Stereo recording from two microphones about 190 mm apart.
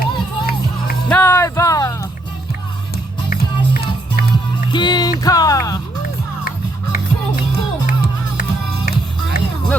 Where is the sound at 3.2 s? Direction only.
50° left (ahead or behind).